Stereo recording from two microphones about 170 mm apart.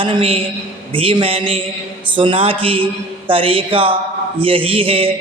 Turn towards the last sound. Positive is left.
turn(degrees=-30)  # may be behind; listen again after turning